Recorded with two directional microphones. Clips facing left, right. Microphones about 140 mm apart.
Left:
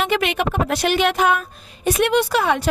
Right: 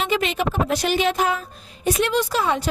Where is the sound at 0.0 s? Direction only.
65° left (ahead or behind).